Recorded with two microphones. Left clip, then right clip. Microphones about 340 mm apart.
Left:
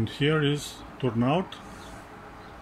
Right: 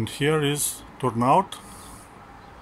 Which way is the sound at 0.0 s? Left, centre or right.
Centre.